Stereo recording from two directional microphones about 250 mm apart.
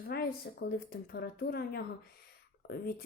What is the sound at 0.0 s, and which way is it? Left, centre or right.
Speech, left.